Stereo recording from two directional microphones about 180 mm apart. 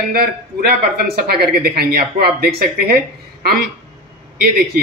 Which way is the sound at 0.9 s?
55° right (ahead or behind).